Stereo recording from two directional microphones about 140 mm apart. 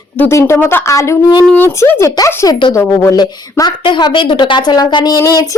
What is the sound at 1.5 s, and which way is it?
A woman's voice, 15° left (ahead or behind).